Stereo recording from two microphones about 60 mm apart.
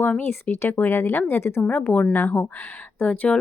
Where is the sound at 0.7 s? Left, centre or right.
Left.